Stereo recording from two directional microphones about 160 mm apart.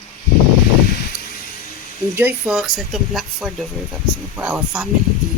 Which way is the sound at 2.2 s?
10° right (ahead or behind).